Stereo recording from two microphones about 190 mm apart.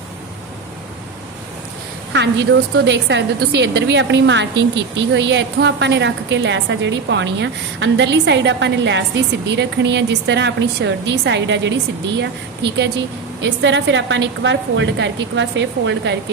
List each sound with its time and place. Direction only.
2.1 s a woman's voice: 70° right (ahead or behind)